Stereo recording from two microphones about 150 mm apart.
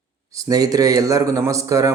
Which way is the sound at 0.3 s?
25° right (ahead or behind).